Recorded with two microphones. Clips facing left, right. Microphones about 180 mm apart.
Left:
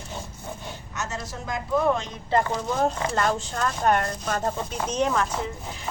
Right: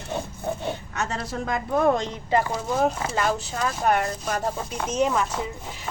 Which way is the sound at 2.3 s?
10° right (ahead or behind).